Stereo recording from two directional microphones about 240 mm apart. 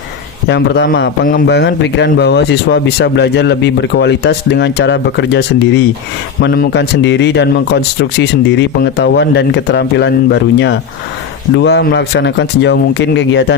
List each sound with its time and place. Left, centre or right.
0.4 s a man's voice: left